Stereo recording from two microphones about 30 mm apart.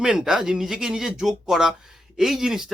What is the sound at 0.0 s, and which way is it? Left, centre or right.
Speech, right.